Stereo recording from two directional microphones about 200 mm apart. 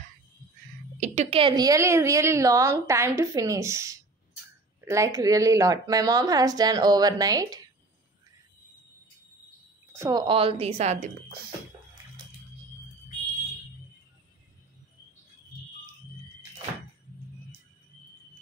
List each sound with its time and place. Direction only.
0.9 s a woman's voice: 35° right (ahead or behind); by 7.6 s 20° right (ahead or behind)
9.9 s a woman's voice: 15° right (ahead or behind)
10.2 s a woman's voice: 25° right (ahead or behind)